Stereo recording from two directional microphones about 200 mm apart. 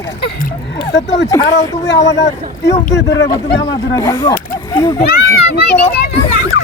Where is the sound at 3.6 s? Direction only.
20° left (ahead or behind).